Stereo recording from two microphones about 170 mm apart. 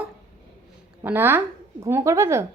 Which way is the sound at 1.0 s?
10° right (ahead or behind).